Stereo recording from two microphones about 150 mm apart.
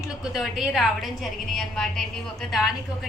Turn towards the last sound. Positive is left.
turn(degrees=0)  # may be behind; listen again after turning